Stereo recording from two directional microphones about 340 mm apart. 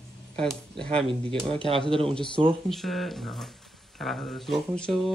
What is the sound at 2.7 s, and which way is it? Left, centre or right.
Speech, centre.